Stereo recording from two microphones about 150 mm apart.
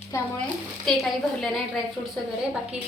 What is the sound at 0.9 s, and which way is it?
Speech, centre (ahead or behind).